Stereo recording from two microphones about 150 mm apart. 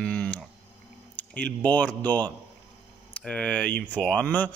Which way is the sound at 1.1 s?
10° left (ahead or behind).